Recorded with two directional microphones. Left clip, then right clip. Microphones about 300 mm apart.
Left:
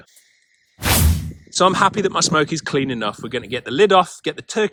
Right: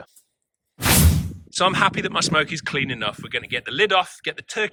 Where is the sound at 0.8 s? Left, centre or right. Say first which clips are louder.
Even; centre.